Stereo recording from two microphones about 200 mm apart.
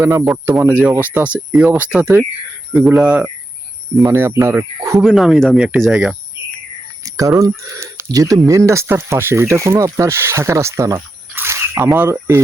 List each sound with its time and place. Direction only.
0.0 s speech: 10° right (ahead or behind)
5.0 s speech: centre (ahead or behind)
7.0 s speech: 15° right (ahead or behind)